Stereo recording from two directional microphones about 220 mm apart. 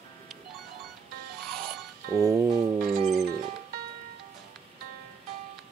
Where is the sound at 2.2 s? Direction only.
15° right (ahead or behind).